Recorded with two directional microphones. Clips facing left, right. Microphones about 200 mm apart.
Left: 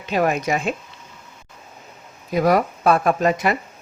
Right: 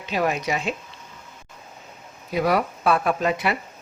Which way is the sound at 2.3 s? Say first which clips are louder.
Left 4 dB; 45° left (ahead or behind).